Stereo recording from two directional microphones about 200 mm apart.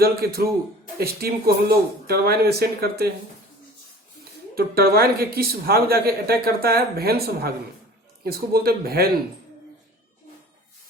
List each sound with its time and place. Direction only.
0.0 s speech: 50° right (ahead or behind)
4.5 s speech: 50° right (ahead or behind)